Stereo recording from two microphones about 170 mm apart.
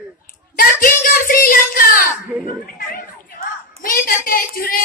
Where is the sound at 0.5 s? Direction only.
55° left (ahead or behind).